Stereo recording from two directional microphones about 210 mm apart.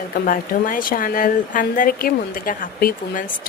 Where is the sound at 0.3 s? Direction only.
40° left (ahead or behind).